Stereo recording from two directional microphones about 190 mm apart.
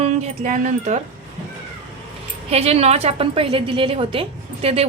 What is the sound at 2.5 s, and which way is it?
A woman's voice, 35° right (ahead or behind).